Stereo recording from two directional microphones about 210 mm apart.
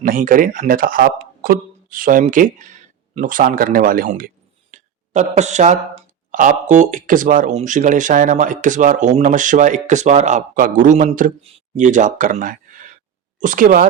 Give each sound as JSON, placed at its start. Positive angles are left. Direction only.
{"t": 0.0, "sound": "speech", "side_deg": -40}
{"t": 4.7, "sound": "a sound", "side_deg": -35}
{"t": 6.3, "sound": "speech", "side_deg": -35}